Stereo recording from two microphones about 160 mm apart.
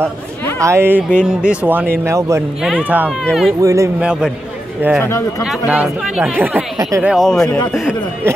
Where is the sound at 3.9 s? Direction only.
5° right (ahead or behind).